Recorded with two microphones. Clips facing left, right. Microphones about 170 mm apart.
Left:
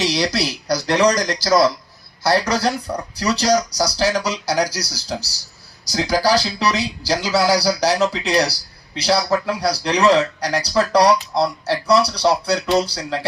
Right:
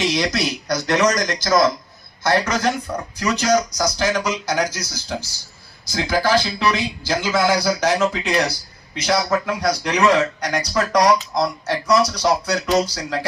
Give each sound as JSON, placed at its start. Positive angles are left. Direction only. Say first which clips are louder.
{"t": 0.0, "sound": "speech", "louder": "even", "side_deg": 35}